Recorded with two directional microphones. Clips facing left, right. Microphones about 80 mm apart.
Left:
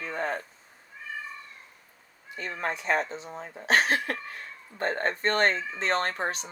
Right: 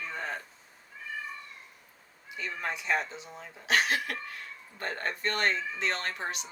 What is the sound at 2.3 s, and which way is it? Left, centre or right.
Speech, left.